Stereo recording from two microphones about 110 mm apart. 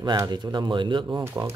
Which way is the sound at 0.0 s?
40° right (ahead or behind).